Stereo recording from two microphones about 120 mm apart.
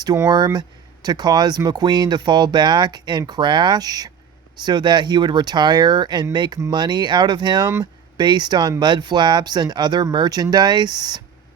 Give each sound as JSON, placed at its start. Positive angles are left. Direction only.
{"t": 0.3, "sound": "speech", "side_deg": -35}